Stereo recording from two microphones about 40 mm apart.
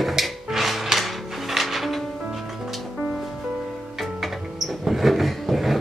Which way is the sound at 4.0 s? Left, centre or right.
Centre.